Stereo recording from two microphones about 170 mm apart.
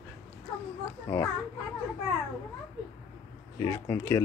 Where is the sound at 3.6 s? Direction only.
15° left (ahead or behind).